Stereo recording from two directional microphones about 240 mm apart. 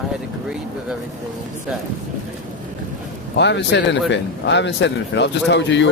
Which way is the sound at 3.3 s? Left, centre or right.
Left.